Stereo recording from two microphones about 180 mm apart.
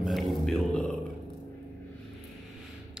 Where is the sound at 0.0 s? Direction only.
Centre (ahead or behind).